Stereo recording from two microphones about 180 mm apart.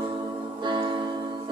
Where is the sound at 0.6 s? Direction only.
25° right (ahead or behind).